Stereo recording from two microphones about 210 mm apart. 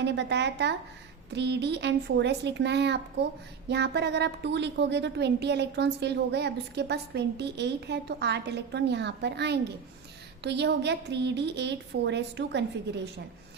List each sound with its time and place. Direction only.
0.0 s a woman's voice: 55° right (ahead or behind)